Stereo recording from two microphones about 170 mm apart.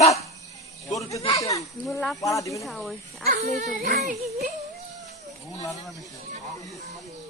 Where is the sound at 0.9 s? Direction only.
20° left (ahead or behind).